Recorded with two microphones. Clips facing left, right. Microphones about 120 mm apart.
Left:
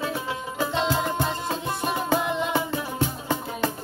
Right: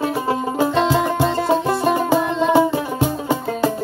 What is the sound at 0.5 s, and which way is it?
Music, 75° right (ahead or behind).